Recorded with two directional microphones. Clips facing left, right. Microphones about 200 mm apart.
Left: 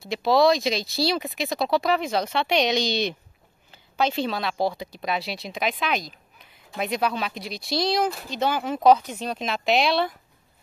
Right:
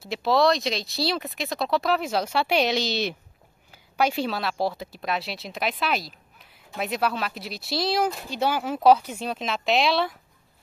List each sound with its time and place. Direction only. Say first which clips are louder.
0.0 s speech: left 2 dB; centre (ahead or behind)